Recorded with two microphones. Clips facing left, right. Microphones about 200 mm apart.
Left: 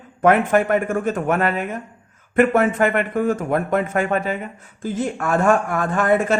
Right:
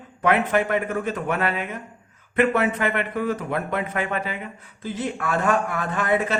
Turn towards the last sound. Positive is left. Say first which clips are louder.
# left 5 dB
turn(degrees=50)  # may be behind; listen again after turning